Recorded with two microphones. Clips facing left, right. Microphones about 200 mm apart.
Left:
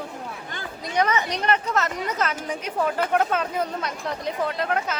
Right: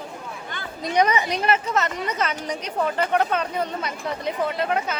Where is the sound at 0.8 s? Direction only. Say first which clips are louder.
Right 3 dB; 15° right (ahead or behind).